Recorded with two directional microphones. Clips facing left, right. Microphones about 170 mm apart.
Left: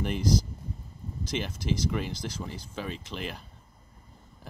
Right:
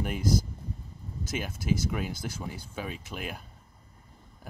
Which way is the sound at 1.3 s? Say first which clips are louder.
Right 1 dB; 5° right (ahead or behind).